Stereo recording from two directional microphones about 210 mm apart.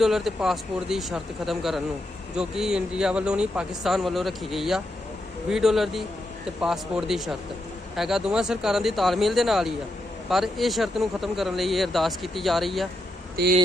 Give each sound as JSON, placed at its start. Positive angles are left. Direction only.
{"t": 0.0, "sound": "speech", "side_deg": 0}